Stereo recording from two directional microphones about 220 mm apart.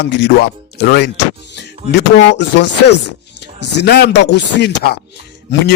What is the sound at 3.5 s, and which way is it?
Speech, 45° left (ahead or behind).